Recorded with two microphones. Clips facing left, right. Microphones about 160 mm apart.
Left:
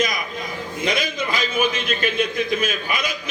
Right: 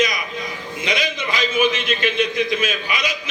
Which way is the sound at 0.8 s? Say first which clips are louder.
Even; 50° left (ahead or behind).